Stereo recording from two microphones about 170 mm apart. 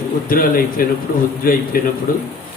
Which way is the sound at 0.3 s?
60° left (ahead or behind).